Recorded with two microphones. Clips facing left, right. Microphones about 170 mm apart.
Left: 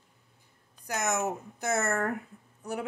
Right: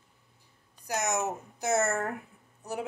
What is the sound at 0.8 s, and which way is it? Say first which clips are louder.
Speech: even; 55° left (ahead or behind).